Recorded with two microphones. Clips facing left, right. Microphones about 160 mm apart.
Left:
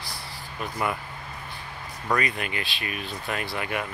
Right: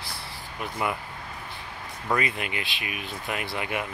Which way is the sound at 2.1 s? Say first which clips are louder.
Left 1 dB; 20° right (ahead or behind).